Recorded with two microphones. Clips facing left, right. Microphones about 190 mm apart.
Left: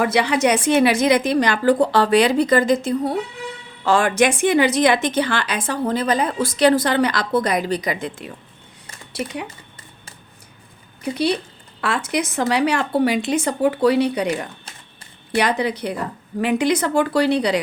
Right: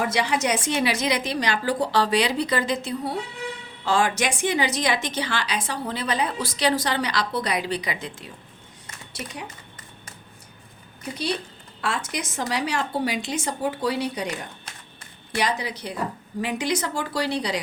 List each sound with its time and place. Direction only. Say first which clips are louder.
0.0 s a woman's voice: left 6 dB; 65° left (ahead or behind)
11.8 s a woman's voice: left 6 dB; 65° left (ahead or behind)
15.4 s a woman's voice: left 7 dB; 60° left (ahead or behind)